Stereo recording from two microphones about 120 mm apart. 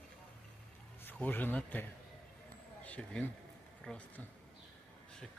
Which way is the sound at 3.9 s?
5° left (ahead or behind).